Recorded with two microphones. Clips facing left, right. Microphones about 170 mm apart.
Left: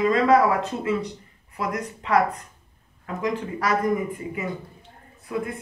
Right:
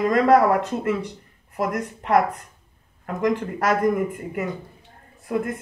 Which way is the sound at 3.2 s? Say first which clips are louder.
Right 4 dB; 50° right (ahead or behind).